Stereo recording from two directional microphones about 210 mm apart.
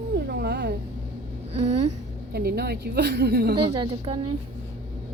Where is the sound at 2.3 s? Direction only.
50° right (ahead or behind).